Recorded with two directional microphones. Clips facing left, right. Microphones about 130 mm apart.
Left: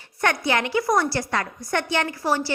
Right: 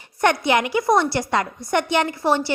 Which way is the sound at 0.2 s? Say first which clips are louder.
Right 4 dB; 20° right (ahead or behind).